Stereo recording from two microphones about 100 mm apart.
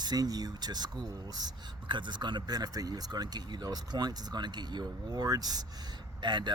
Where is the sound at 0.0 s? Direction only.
40° right (ahead or behind).